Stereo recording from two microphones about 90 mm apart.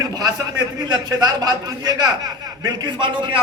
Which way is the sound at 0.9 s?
45° right (ahead or behind).